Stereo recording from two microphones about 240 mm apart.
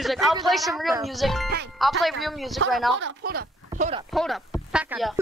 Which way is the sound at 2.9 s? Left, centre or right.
Right.